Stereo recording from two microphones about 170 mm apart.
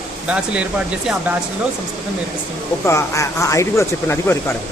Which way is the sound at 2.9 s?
20° left (ahead or behind).